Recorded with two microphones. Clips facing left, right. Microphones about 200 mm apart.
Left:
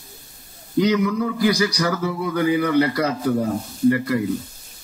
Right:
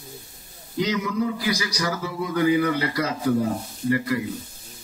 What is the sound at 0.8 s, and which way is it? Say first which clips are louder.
A man's voice: left 5 dB; 55° left (ahead or behind).